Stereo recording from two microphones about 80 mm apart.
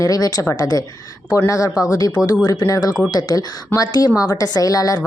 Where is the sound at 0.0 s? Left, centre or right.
Left.